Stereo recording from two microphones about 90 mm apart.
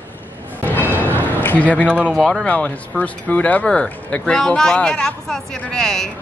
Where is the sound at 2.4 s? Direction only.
15° left (ahead or behind).